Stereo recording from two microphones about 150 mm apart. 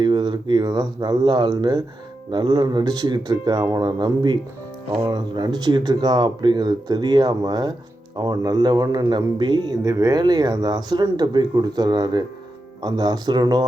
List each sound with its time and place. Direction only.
0.0 s speech: 30° right (ahead or behind)